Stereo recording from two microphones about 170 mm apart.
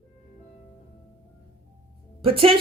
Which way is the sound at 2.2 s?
35° right (ahead or behind).